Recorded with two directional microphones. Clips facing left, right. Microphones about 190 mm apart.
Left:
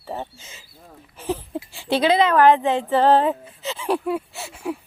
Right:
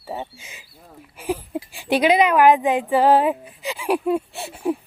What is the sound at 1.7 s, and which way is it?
Speech, 15° right (ahead or behind).